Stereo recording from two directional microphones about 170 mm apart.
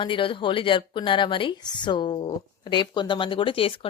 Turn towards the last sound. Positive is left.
turn(degrees=30)  # may be behind; listen again after turning